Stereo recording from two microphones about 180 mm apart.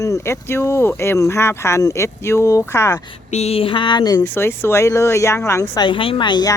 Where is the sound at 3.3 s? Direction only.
35° left (ahead or behind).